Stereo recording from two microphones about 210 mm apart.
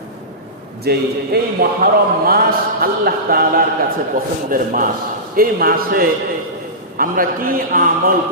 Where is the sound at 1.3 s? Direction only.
50° right (ahead or behind).